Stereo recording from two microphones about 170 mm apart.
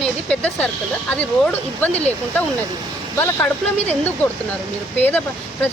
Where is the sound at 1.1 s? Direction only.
10° left (ahead or behind).